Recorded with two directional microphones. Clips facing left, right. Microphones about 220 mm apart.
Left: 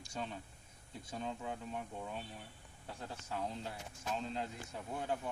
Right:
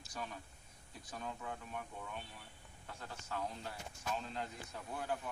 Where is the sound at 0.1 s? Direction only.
25° left (ahead or behind).